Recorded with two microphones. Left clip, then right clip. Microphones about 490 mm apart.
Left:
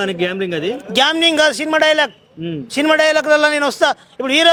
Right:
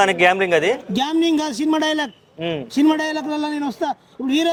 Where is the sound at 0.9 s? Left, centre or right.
Left.